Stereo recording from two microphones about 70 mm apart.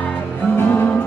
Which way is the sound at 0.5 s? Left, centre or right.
Left.